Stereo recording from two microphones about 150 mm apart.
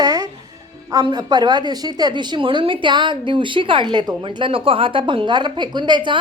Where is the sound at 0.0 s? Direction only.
25° right (ahead or behind).